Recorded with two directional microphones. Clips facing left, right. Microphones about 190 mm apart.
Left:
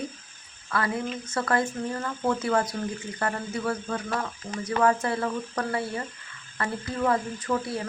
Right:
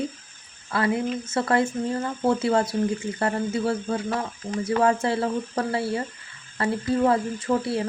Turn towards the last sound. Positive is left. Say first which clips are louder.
# right 4 dB
turn(degrees=-30)  # may be behind; listen again after turning